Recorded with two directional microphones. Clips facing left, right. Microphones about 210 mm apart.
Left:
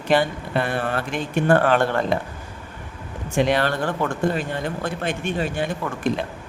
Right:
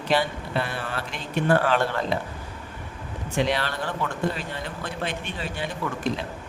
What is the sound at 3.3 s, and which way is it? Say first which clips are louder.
Speech: left 5 dB; 50° left (ahead or behind).